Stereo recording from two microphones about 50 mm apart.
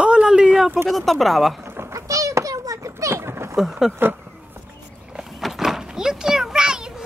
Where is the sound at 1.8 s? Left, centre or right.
Right.